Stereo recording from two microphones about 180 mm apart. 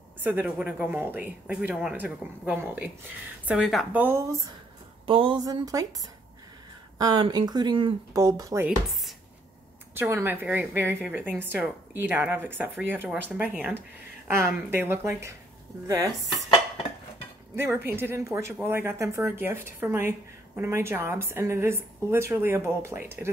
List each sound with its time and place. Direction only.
0.2 s speech: 10° right (ahead or behind)
5.0 s speech: 30° right (ahead or behind)
7.0 s speech: 20° right (ahead or behind)
9.9 s speech: 15° right (ahead or behind)
17.6 s speech: 15° right (ahead or behind)